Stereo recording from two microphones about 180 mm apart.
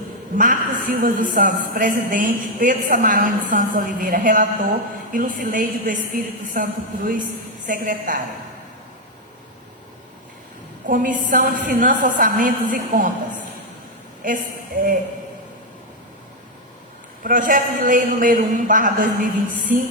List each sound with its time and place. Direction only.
0.3 s a woman's voice: 45° right (ahead or behind)
10.8 s a woman's voice: 45° right (ahead or behind)
17.2 s a woman's voice: 45° right (ahead or behind)